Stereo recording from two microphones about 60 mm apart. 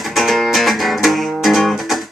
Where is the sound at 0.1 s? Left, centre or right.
Centre.